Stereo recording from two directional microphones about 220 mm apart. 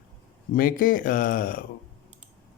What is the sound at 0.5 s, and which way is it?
Speech, 40° left (ahead or behind).